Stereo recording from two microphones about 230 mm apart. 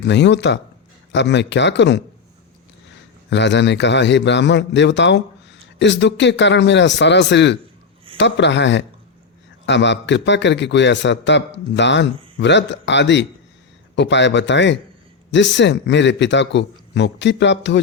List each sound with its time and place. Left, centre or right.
0.0 s a man's voice: left
3.2 s a man's voice: left